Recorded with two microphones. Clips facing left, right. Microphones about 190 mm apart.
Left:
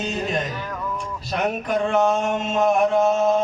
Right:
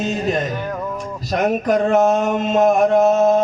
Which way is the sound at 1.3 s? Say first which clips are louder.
Right 6 dB; 40° right (ahead or behind).